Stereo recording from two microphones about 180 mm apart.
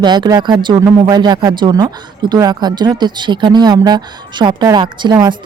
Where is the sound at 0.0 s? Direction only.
25° right (ahead or behind).